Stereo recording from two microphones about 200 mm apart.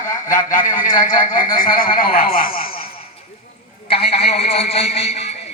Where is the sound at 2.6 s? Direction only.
25° left (ahead or behind).